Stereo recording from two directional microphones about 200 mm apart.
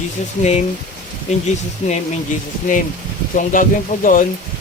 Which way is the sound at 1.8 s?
35° left (ahead or behind).